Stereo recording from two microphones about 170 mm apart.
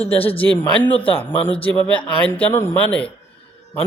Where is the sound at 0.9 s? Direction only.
35° left (ahead or behind).